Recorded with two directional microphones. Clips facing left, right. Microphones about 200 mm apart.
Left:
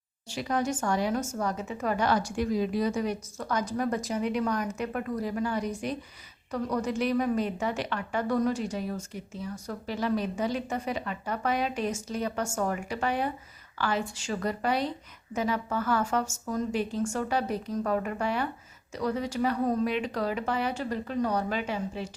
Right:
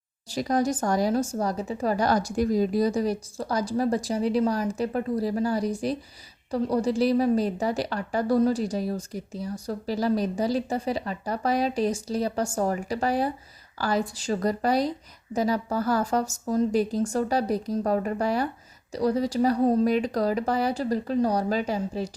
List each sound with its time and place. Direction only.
0.3 s a woman's voice: 40° right (ahead or behind)